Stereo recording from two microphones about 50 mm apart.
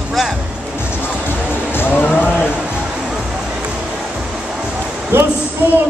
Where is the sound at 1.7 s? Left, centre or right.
Left.